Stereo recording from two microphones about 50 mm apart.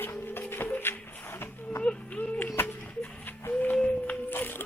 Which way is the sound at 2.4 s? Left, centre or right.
Left.